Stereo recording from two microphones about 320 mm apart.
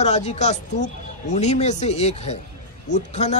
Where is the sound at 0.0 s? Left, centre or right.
Left.